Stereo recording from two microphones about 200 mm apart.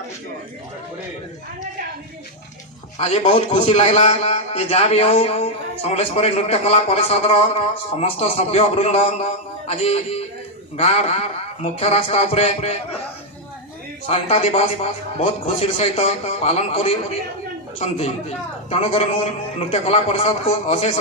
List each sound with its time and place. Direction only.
3.0 s a man's voice: 30° left (ahead or behind)
14.1 s a man's voice: 30° left (ahead or behind)